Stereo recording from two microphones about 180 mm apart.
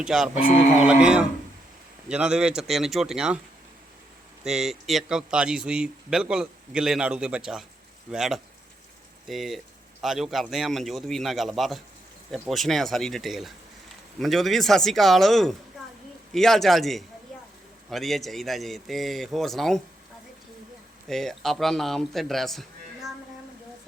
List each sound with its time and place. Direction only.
0.0 s a man's voice: 5° right (ahead or behind)
0.4 s speech: 45° left (ahead or behind)
0.9 s a man's voice: 5° right (ahead or behind)
4.4 s a man's voice: centre (ahead or behind)
21.1 s a man's voice: centre (ahead or behind)